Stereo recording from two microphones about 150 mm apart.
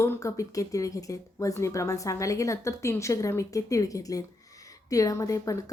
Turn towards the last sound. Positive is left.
turn(degrees=20)  # may be behind; listen again after turning